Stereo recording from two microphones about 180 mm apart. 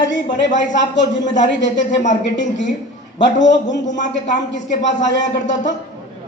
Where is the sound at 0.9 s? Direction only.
80° left.